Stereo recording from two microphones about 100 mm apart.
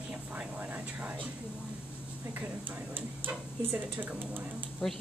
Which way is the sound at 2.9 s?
20° right (ahead or behind).